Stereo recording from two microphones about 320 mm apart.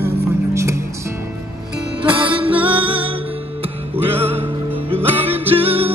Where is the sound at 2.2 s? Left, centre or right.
Centre.